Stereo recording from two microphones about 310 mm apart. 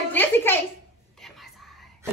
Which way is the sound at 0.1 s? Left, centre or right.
Centre.